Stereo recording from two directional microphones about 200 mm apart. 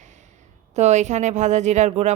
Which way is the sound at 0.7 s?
35° right (ahead or behind).